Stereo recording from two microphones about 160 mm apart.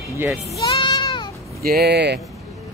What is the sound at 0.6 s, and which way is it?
Sheep, 30° left (ahead or behind).